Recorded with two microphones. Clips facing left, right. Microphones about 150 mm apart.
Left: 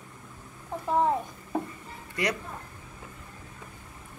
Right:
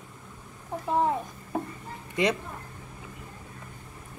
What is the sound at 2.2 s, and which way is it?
Speech, 20° right (ahead or behind).